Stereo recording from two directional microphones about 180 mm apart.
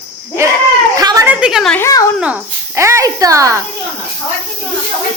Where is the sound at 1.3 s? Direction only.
5° right (ahead or behind).